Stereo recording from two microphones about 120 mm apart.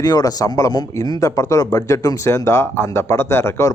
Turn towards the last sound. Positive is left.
turn(degrees=20)  # may be behind; listen again after turning